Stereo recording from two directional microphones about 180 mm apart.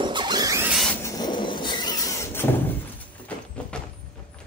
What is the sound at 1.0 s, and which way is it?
Vehicle, 20° left (ahead or behind).